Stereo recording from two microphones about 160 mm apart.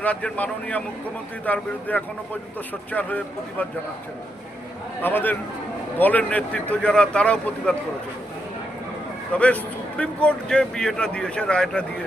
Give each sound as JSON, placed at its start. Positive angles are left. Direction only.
{"t": 0.0, "sound": "speech", "side_deg": 10}
{"t": 5.0, "sound": "speech", "side_deg": 10}
{"t": 9.3, "sound": "speech", "side_deg": 10}